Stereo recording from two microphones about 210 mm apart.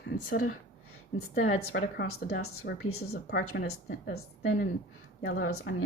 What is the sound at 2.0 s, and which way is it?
Speech, 70° left (ahead or behind).